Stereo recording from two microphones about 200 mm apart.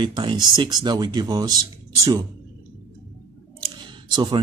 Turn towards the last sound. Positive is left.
turn(degrees=-20)  # may be behind; listen again after turning